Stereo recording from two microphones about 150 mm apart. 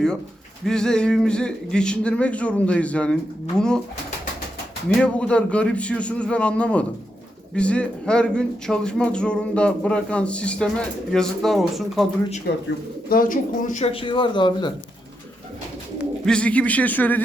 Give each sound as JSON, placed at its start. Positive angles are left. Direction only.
{"t": 0.6, "sound": "speech", "side_deg": 5}
{"t": 4.9, "sound": "speech", "side_deg": 5}
{"t": 12.5, "sound": "speech", "side_deg": 90}
{"t": 13.1, "sound": "speech", "side_deg": 70}
{"t": 16.2, "sound": "speech", "side_deg": 5}